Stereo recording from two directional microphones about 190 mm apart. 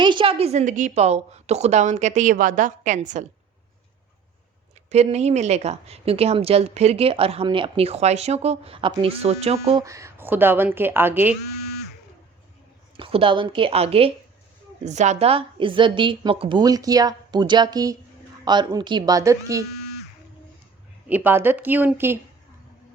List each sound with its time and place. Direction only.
0.0 s a woman's voice: 25° right (ahead or behind)
4.9 s a woman's voice: 35° right (ahead or behind)
9.8 s a woman's voice: 15° right (ahead or behind)
13.0 s a woman's voice: 30° right (ahead or behind)
21.1 s a woman's voice: 10° right (ahead or behind)